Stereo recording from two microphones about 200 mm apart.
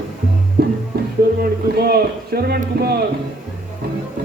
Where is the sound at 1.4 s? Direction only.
50° right (ahead or behind).